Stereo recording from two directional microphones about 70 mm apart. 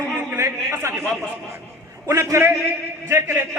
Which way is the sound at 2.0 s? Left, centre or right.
Right.